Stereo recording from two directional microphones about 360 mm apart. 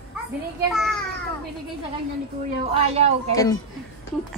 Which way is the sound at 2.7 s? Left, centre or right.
Centre.